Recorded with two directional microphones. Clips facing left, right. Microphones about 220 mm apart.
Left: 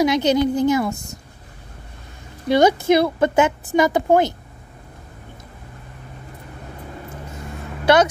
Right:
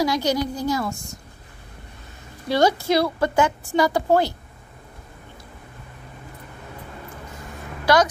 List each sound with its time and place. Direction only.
0.0 s a woman's voice: 20° left (ahead or behind)
2.4 s a woman's voice: 20° left (ahead or behind)
7.8 s speech: 25° left (ahead or behind)